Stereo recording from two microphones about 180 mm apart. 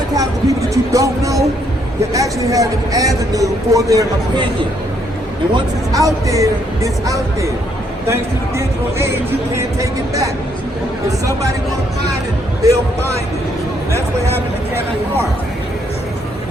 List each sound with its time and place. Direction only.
0.1 s music: 20° right (ahead or behind)
2.1 s a woman's voice: 20° right (ahead or behind)
5.5 s a woman's voice: 20° right (ahead or behind)
12.6 s speech: 15° right (ahead or behind)